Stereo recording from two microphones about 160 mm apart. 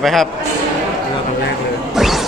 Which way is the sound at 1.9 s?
Centre (ahead or behind).